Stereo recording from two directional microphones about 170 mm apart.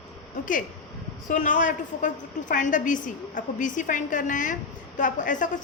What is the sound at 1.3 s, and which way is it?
A woman's voice, 50° left (ahead or behind).